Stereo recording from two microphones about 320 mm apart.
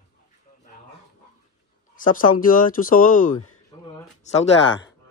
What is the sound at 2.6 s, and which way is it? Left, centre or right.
Speech, left.